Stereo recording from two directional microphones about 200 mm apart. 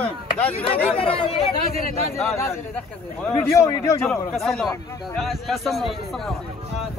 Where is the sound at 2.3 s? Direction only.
15° left (ahead or behind).